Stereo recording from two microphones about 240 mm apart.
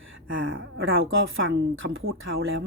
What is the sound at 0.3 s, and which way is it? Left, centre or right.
Speech, right.